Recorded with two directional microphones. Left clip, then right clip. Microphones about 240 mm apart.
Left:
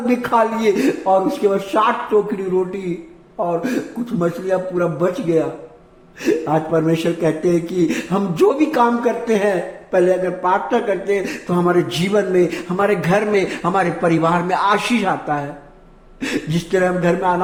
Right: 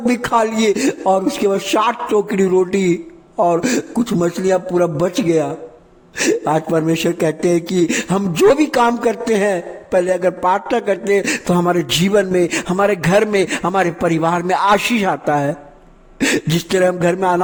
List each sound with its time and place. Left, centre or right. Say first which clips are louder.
0.0 s speech: right 1 dB; right